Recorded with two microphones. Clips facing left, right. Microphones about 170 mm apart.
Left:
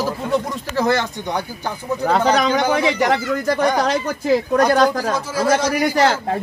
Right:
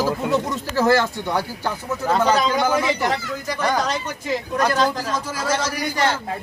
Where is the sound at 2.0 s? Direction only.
70° left (ahead or behind).